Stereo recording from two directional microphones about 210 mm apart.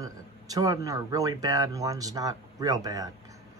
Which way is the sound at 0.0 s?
15° right (ahead or behind).